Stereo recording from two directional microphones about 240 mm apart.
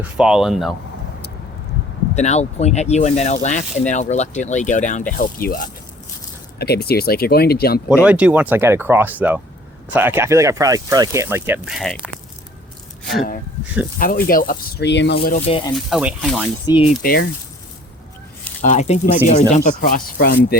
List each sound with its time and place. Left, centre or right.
0.0 s speech: centre
2.1 s speech: left
8.0 s speech: centre
14.0 s speech: left
15.4 s speech: left
15.7 s speech: centre
16.6 s speech: left
17.0 s speech: left
18.6 s speech: left